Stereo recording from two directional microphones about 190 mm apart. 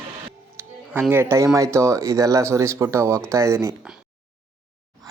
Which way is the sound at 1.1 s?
15° right (ahead or behind).